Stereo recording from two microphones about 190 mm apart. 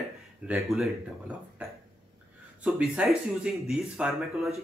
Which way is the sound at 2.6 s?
5° right (ahead or behind).